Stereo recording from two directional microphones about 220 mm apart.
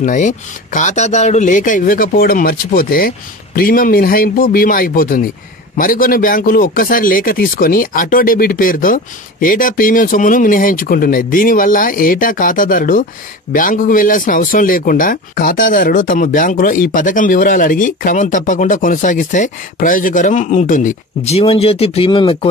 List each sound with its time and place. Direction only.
0.0 s speech: 35° left (ahead or behind)